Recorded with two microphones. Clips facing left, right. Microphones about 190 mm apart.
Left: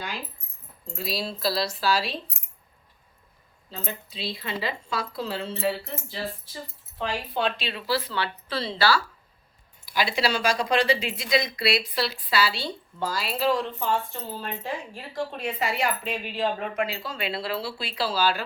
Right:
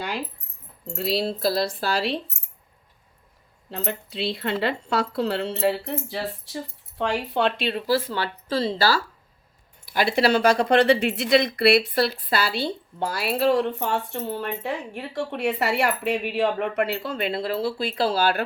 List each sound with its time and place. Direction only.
0.9 s a woman's voice: 65° right (ahead or behind)
3.7 s speech: 70° right (ahead or behind); by 9.0 s 40° right (ahead or behind)
9.8 s a woman's voice: 55° right (ahead or behind)